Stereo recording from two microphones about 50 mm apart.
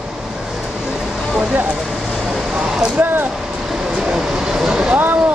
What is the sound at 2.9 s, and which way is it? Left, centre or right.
Speech, right.